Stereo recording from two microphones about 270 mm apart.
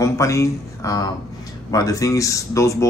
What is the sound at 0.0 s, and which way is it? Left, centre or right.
Speech, centre.